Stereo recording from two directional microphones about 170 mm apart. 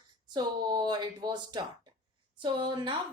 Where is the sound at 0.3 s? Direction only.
25° right (ahead or behind).